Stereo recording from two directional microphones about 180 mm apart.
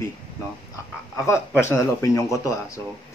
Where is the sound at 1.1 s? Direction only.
15° left (ahead or behind).